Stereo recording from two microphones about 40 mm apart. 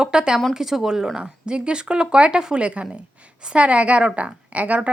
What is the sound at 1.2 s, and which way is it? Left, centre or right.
A woman's voice, right.